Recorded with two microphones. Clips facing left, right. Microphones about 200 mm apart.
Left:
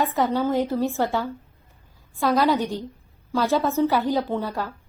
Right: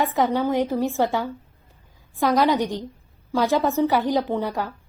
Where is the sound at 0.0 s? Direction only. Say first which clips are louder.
Right 1 dB; 15° right (ahead or behind).